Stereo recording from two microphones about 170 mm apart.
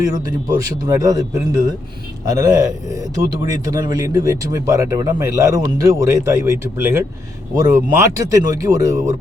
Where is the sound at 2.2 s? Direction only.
20° right (ahead or behind).